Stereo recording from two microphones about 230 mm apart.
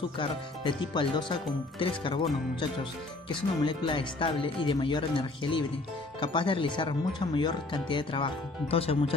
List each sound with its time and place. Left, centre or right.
0.2 s speech: left